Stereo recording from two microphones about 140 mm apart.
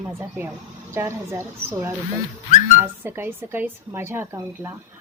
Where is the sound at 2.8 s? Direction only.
15° right (ahead or behind).